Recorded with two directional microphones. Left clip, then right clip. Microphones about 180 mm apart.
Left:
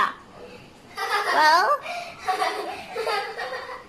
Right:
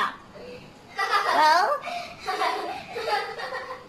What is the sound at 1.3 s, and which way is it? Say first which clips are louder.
Laughter: left 2 dB; 15° left (ahead or behind).